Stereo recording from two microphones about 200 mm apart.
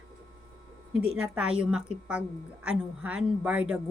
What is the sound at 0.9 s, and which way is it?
A woman's voice, 5° right (ahead or behind).